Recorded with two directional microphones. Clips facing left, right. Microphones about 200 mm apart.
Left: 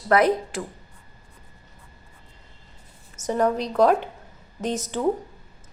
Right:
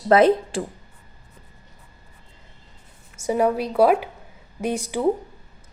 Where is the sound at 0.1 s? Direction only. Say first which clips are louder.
Right 4 dB; 25° right (ahead or behind).